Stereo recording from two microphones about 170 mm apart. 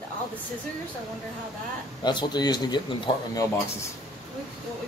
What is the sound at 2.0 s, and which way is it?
Speech, 25° left (ahead or behind).